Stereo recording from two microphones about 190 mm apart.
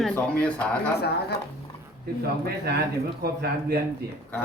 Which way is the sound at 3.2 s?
55° right (ahead or behind).